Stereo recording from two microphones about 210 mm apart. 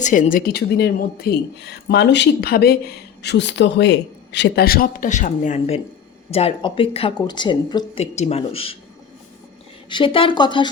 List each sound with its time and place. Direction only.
0.0 s a woman's voice: 35° left (ahead or behind)
9.9 s a woman's voice: 25° left (ahead or behind)